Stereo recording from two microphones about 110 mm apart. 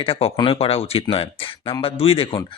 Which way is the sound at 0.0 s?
60° left (ahead or behind).